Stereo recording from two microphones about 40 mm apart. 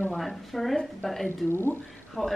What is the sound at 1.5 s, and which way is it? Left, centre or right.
Speech, left.